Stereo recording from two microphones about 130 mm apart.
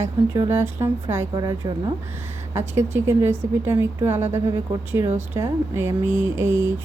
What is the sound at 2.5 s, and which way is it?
Speech, 20° right (ahead or behind).